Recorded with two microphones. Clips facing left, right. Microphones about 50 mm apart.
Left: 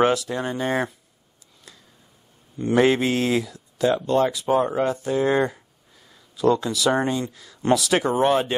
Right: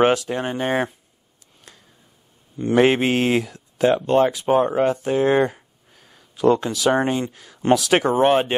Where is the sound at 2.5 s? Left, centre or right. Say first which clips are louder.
Right 2 dB; right.